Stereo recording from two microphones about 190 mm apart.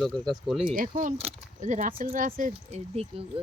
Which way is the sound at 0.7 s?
45° right (ahead or behind).